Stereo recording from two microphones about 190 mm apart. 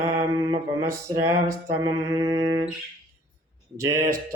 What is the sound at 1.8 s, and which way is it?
Mantra, 20° right (ahead or behind).